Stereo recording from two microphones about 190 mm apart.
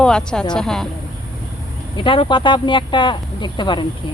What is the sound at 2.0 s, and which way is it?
Speech, 25° left (ahead or behind).